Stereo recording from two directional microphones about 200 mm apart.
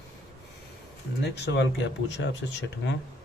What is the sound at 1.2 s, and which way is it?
Speech, 60° left (ahead or behind).